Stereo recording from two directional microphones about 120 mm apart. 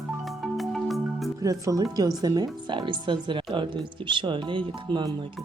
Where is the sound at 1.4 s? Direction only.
30° right (ahead or behind).